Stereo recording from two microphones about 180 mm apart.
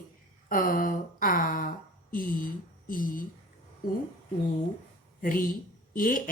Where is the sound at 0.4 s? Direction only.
55° left (ahead or behind).